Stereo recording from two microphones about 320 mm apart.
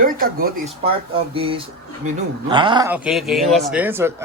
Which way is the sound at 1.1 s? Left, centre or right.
Centre.